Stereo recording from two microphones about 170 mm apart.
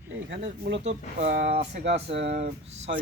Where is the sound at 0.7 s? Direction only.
75° right (ahead or behind); by 2.4 s 90° right.